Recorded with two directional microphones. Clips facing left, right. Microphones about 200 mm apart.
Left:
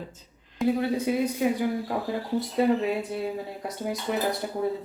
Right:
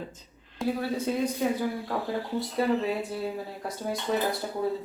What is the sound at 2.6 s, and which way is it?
Speech, 20° left (ahead or behind).